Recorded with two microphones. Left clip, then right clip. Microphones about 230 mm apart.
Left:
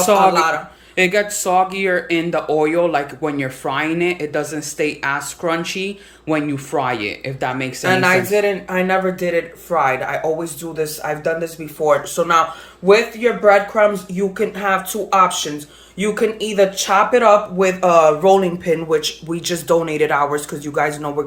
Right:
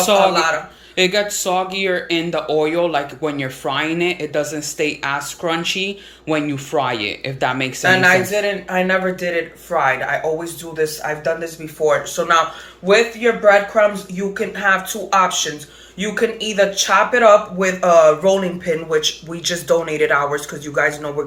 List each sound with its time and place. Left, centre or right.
0.2 s speech: left
0.9 s speech: centre
7.9 s speech: left